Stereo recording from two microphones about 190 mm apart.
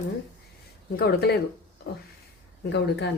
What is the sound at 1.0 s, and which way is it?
Speech, 55° left (ahead or behind).